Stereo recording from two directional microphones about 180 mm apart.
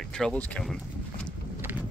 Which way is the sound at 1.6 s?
10° right (ahead or behind).